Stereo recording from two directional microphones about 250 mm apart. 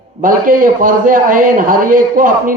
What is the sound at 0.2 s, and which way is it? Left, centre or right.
A man's voice, right.